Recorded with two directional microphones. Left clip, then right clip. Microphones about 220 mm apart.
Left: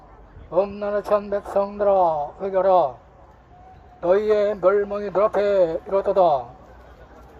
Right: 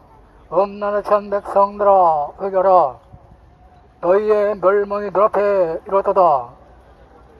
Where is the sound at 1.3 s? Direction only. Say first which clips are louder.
Right 4 dB; 25° right (ahead or behind).